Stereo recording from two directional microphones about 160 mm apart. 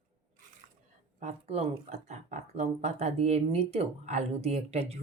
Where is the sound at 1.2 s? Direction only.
45° right (ahead or behind).